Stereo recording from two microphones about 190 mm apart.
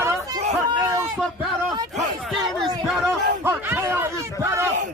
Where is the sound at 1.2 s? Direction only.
Centre (ahead or behind).